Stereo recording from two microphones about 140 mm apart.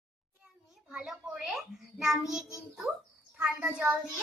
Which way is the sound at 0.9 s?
5° right (ahead or behind).